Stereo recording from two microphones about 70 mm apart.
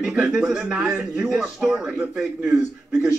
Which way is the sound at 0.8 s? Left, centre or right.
Right.